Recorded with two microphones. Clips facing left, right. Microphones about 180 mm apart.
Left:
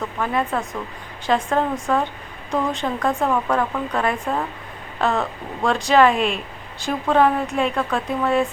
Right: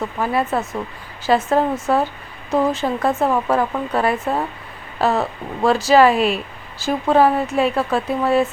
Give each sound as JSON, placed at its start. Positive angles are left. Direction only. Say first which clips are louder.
{"t": 0.2, "sound": "speech", "louder": "right 2 dB", "side_deg": -5}
{"t": 3.2, "sound": "speech", "louder": "right 2 dB", "side_deg": -25}
{"t": 3.9, "sound": "speech", "louder": "right 4 dB", "side_deg": -5}